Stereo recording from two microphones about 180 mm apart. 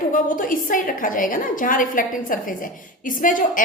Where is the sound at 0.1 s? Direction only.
50° left (ahead or behind).